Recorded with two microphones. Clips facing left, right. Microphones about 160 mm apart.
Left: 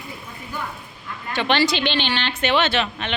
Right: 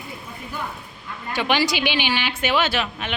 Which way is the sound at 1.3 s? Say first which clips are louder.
Left 1 dB; 10° right (ahead or behind).